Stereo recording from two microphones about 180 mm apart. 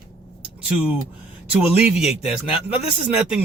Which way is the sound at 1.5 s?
5° right (ahead or behind).